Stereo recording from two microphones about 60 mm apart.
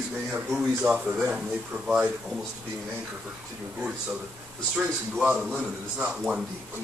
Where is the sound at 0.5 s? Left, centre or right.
Centre.